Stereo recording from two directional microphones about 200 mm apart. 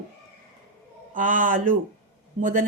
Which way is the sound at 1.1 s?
40° right (ahead or behind).